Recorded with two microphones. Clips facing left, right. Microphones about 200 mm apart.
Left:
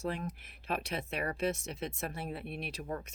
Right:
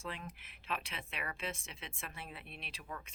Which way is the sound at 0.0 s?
40° left (ahead or behind).